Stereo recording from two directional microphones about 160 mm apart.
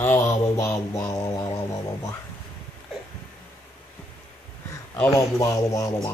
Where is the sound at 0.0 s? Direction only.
15° left (ahead or behind).